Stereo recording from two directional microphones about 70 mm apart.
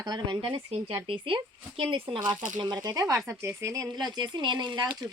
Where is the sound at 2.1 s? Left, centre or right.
Right.